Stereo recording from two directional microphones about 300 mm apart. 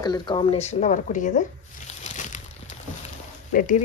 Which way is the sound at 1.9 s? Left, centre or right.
Left.